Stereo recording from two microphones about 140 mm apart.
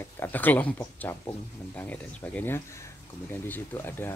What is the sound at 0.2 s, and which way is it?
Speech, 15° left (ahead or behind).